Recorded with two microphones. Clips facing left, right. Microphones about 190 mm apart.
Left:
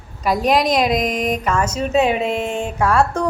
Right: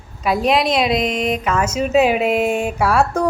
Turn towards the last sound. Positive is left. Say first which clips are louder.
# even
turn(degrees=-10)  # may be behind; listen again after turning